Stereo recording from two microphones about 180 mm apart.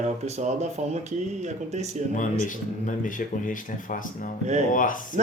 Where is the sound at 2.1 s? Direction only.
45° left (ahead or behind).